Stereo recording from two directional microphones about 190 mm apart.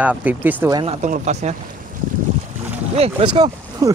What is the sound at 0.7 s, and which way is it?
Speech, 35° right (ahead or behind).